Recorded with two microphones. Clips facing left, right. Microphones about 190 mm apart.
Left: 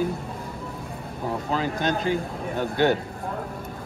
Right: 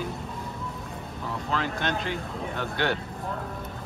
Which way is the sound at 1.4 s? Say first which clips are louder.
Left 3 dB; 40° left (ahead or behind).